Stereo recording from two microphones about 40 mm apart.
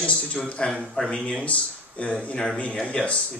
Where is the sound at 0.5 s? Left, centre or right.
Left.